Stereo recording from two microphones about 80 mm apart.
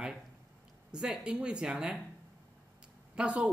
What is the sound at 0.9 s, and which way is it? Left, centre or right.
Speech, centre.